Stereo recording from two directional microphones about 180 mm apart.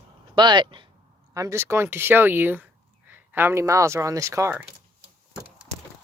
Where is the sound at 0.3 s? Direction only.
25° right (ahead or behind).